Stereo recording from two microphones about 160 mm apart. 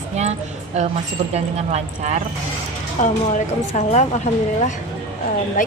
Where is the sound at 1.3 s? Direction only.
45° right (ahead or behind).